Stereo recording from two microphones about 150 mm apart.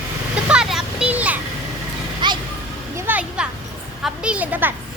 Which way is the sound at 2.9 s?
10° right (ahead or behind).